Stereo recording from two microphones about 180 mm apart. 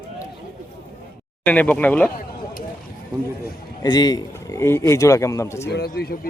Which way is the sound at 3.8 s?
25° left (ahead or behind).